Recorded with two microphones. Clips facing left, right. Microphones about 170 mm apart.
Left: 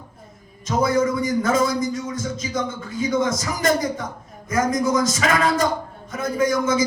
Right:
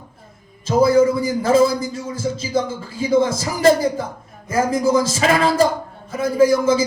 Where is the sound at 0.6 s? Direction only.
30° right (ahead or behind).